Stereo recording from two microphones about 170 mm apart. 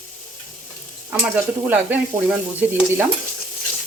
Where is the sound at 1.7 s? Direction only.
10° right (ahead or behind).